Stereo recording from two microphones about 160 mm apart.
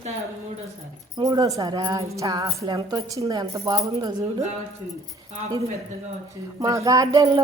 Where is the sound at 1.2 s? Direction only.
25° right (ahead or behind).